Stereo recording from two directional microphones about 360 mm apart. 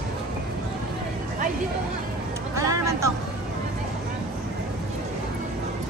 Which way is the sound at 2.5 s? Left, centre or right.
Centre.